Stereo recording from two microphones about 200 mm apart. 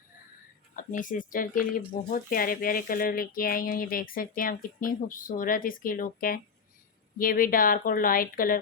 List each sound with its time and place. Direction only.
0.8 s speech: 40° left (ahead or behind)